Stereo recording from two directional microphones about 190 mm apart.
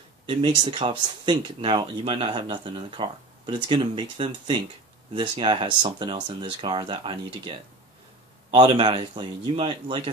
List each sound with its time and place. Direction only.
0.3 s speech: 25° right (ahead or behind)